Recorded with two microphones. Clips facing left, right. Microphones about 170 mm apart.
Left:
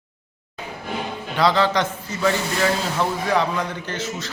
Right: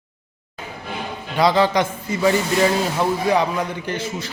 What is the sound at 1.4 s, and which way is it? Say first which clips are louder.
A man's voice: right 2 dB; 15° right (ahead or behind).